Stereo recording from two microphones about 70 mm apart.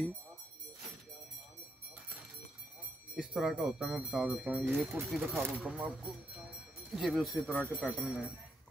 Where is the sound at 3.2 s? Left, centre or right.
Centre.